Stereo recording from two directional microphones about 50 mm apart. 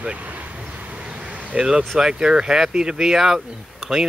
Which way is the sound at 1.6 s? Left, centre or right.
Centre.